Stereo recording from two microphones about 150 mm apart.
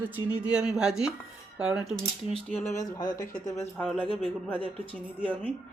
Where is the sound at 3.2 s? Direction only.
60° left (ahead or behind).